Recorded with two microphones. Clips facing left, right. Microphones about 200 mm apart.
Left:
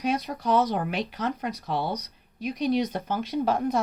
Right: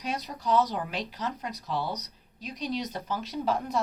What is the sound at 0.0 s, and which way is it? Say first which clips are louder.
Speech: left 6 dB; 55° left (ahead or behind).